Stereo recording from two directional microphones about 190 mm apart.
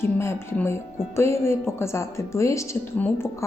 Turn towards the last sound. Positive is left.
turn(degrees=15)  # may be behind; listen again after turning